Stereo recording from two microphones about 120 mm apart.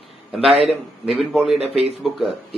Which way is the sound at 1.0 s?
5° right (ahead or behind).